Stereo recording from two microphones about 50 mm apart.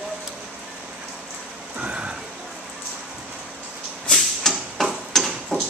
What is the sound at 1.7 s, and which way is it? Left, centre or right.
Rain, right.